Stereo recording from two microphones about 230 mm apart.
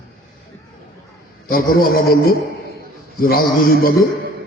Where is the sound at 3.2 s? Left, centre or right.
Left.